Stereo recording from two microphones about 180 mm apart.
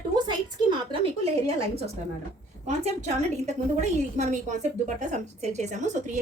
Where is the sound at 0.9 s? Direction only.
30° right (ahead or behind).